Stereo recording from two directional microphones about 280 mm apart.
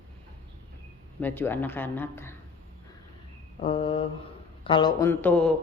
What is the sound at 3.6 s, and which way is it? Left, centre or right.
Speech, centre.